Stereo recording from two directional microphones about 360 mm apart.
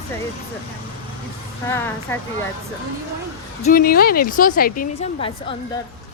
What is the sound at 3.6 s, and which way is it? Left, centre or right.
A woman's voice, left.